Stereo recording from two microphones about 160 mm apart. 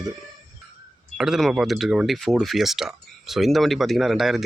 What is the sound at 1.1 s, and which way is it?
Speech, 5° right (ahead or behind).